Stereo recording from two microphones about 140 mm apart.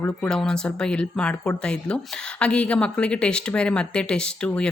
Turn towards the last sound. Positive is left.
turn(degrees=5)  # may be behind; listen again after turning